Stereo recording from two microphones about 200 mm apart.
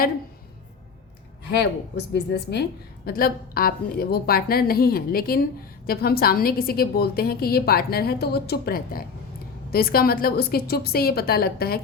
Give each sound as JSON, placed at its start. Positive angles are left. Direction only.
{"t": 1.5, "sound": "a woman's voice", "side_deg": 60}